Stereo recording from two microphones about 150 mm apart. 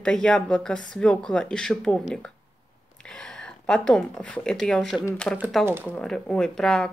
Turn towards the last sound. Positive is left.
turn(degrees=5)  # may be behind; listen again after turning